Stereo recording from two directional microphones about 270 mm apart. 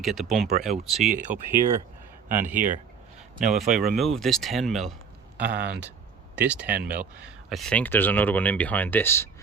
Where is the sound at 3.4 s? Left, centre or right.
Centre.